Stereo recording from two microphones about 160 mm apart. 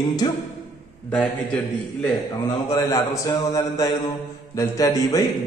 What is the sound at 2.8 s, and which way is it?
A man's voice, 25° left (ahead or behind).